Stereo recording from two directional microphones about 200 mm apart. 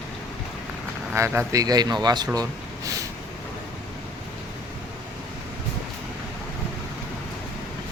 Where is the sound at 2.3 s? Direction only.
15° right (ahead or behind).